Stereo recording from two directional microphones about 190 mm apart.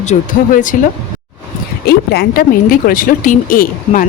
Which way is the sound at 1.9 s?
55° left (ahead or behind).